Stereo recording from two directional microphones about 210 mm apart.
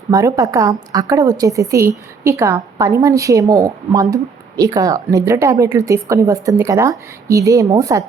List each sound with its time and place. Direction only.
0.1 s a woman's voice: 15° right (ahead or behind)